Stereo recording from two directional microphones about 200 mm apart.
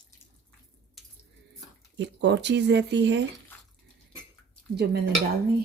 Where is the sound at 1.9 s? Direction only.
60° right (ahead or behind).